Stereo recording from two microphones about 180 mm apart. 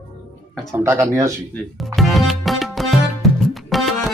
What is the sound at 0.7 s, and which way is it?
Speech, 15° right (ahead or behind).